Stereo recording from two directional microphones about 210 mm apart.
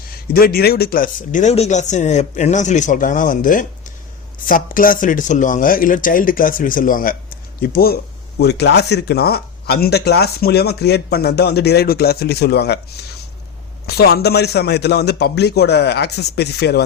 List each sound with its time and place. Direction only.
0.3 s speech: 45° left (ahead or behind)
13.8 s speech: 50° left (ahead or behind)